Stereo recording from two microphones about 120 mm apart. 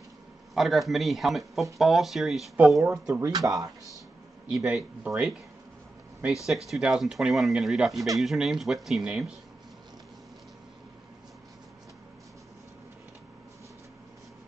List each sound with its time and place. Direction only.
0.6 s speech: centre (ahead or behind)
2.8 s speech: 25° right (ahead or behind)
4.6 s speech: 5° right (ahead or behind)
6.4 s speech: centre (ahead or behind)